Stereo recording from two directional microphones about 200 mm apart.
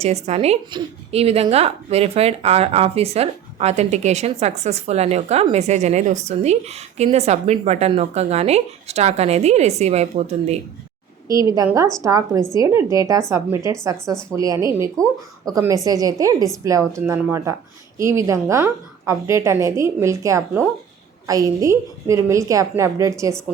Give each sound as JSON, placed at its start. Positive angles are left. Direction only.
{"t": 0.0, "sound": "a woman's voice", "side_deg": -30}
{"t": 11.3, "sound": "speech", "side_deg": -15}